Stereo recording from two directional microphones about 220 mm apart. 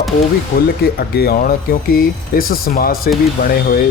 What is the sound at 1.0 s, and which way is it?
Speech, 45° left (ahead or behind).